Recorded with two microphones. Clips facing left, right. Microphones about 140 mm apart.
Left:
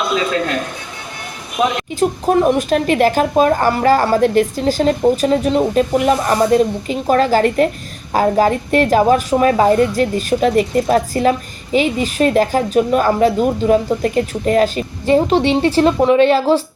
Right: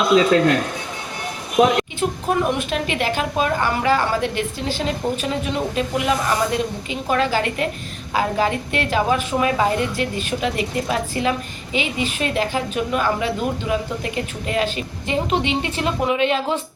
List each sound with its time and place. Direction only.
2.0 s a woman's voice: 40° left (ahead or behind)